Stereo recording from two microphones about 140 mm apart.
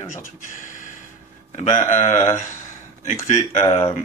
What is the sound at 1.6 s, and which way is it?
Speech, 55° left (ahead or behind).